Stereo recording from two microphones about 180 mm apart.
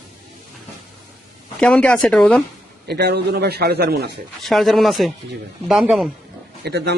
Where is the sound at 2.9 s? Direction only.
65° right (ahead or behind).